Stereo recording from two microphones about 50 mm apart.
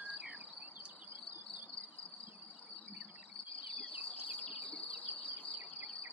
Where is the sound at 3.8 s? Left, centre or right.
Right.